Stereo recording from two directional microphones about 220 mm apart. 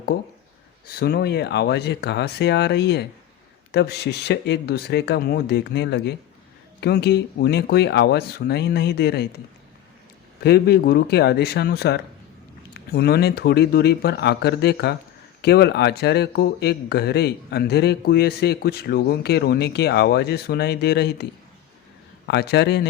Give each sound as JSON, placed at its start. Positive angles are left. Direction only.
{"t": 0.9, "sound": "speech", "side_deg": 45}
{"t": 10.4, "sound": "speech", "side_deg": 45}
{"t": 22.3, "sound": "speech", "side_deg": 50}